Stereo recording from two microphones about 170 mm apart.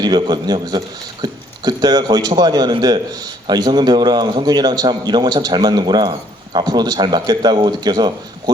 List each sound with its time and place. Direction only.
0.0 s a man's voice: 25° right (ahead or behind)